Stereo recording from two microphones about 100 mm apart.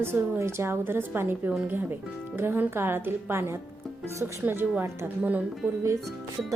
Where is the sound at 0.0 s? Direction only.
25° right (ahead or behind).